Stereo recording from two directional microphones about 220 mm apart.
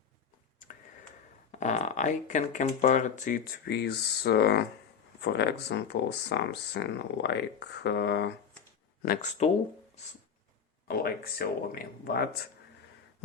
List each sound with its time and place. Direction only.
1.5 s speech: 30° left (ahead or behind); by 8.3 s 50° left (ahead or behind)
9.4 s speech: 30° left (ahead or behind)
10.8 s speech: 45° left (ahead or behind)